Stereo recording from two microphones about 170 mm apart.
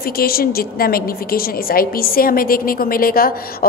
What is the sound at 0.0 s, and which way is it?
A woman's voice, 60° left (ahead or behind).